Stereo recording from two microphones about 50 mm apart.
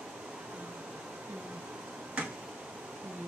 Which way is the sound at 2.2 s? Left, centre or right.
Right.